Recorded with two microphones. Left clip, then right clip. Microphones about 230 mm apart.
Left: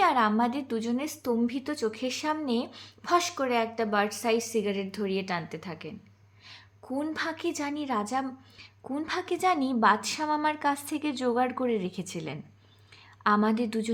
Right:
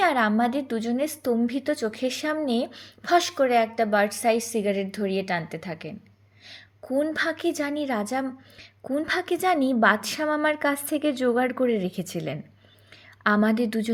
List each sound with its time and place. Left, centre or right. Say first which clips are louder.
0.0 s a woman's voice: right 2 dB; centre